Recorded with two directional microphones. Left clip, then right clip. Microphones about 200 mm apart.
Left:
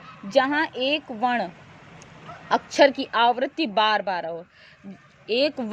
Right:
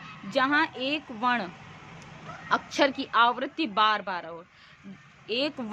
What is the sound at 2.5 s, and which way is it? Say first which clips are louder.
A woman's voice: left 7 dB; 20° left (ahead or behind).